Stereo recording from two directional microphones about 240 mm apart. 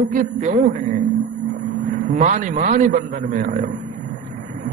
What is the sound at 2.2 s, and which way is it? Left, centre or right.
A man's voice, right.